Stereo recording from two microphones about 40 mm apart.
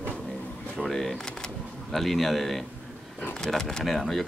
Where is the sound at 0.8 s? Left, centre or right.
Centre.